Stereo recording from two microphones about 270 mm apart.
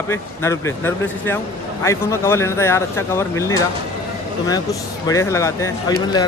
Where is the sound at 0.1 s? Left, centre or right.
Centre.